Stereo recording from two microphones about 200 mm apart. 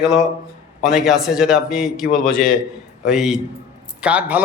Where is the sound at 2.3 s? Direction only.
45° left (ahead or behind).